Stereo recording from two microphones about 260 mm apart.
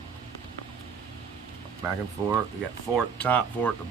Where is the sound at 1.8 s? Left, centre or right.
Centre.